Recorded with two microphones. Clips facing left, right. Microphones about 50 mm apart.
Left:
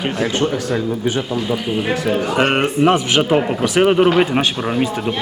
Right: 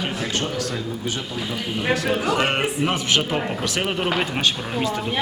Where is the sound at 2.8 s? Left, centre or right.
Centre.